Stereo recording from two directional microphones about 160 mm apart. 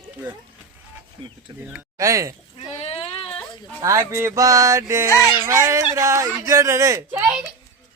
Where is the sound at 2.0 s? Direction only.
20° right (ahead or behind).